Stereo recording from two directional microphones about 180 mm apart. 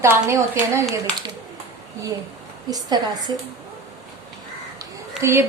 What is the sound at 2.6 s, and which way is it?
Speech, 20° right (ahead or behind).